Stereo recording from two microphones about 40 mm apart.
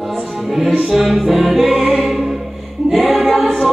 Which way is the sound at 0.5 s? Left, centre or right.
Centre.